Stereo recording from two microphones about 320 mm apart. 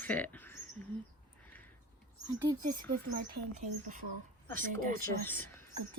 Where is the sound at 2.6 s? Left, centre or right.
Right.